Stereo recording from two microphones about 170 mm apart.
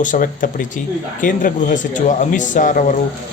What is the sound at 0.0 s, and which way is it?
Speech, 50° left (ahead or behind).